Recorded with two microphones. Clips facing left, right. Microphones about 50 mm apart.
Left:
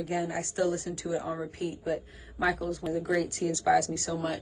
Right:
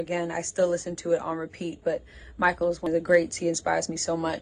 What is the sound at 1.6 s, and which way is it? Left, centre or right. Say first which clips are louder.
Speech: right 3 dB; right.